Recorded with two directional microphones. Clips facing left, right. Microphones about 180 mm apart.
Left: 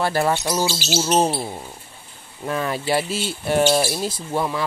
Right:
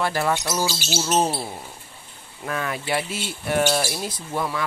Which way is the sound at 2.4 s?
30° left (ahead or behind).